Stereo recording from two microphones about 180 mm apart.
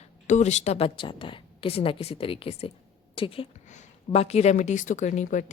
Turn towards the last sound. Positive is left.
turn(degrees=45)  # may be behind; listen again after turning